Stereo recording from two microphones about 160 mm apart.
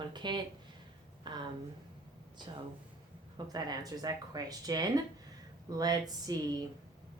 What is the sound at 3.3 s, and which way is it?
Speech, 25° right (ahead or behind).